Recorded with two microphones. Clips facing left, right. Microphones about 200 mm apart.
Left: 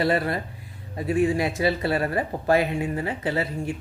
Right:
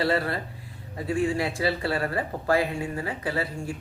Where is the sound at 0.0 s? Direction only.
20° left (ahead or behind).